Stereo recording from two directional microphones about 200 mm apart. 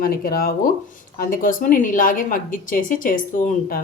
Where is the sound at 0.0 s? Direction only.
50° left (ahead or behind).